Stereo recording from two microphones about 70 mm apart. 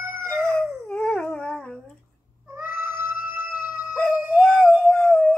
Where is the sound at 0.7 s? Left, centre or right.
Centre.